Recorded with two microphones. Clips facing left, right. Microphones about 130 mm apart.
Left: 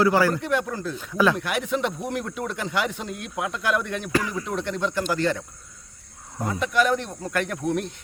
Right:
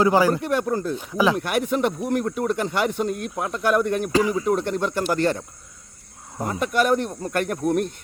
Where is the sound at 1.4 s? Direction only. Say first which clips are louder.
Right 3 dB; 45° right (ahead or behind).